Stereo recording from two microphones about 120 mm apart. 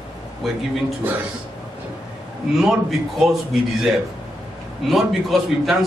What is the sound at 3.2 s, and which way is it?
A man's voice, centre (ahead or behind).